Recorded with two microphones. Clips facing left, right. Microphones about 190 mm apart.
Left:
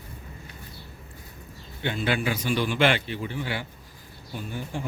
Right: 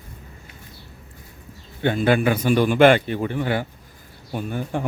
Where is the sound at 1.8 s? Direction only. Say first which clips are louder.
Right 8 dB; 50° right (ahead or behind).